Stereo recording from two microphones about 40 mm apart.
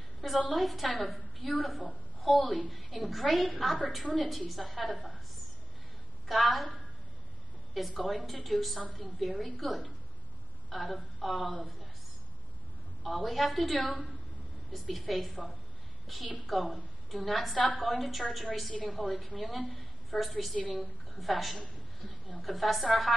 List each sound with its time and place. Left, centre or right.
0.5 s a woman's voice: centre
6.2 s a woman's voice: centre
13.0 s a woman's voice: centre